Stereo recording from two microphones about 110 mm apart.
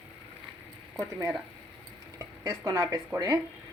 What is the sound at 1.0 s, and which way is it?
Speech, 25° right (ahead or behind).